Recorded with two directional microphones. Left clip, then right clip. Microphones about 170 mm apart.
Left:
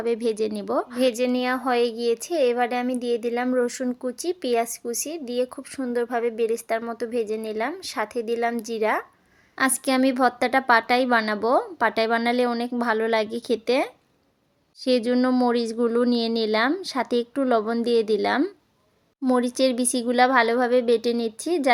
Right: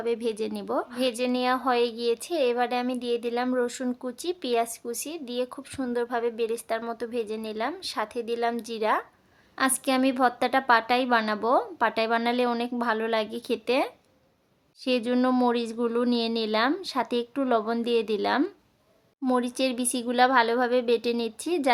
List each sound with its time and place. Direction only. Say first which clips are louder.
0.0 s speech: left 4 dB; 20° left (ahead or behind)